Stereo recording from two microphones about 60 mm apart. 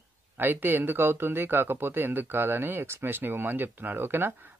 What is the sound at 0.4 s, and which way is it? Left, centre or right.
Speech, right.